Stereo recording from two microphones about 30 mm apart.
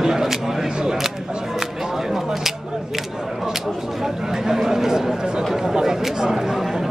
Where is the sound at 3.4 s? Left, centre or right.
Centre.